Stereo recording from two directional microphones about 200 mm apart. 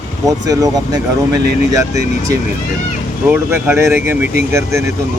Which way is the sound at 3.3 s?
10° right (ahead or behind).